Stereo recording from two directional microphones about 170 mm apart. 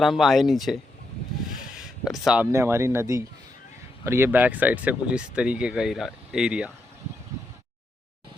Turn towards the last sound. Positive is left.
turn(degrees=-5)  # may be behind; listen again after turning